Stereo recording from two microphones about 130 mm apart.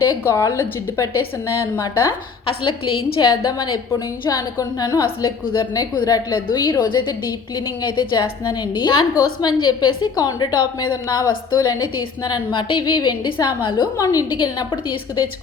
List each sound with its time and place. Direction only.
0.1 s a woman's voice: 20° left (ahead or behind)
2.6 s a woman's voice: 40° left (ahead or behind)